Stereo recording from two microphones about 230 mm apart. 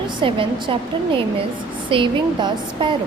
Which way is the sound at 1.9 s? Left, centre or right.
Right.